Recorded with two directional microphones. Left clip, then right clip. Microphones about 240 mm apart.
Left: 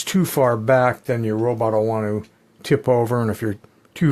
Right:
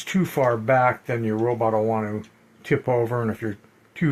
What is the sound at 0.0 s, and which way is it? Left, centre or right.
Speech, left.